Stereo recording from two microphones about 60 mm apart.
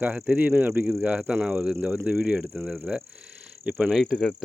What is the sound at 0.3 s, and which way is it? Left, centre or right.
Speech, right.